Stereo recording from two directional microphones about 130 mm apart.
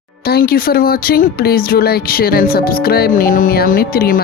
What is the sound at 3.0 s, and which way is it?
Speech, 90° left.